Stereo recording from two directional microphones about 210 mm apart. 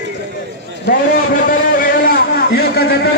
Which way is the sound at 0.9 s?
40° left (ahead or behind).